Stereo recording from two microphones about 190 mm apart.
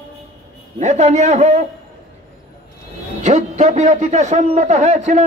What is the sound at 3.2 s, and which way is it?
A man's voice, 40° right (ahead or behind).